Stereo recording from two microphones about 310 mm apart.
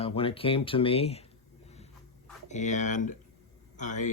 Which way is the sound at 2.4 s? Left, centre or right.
Left.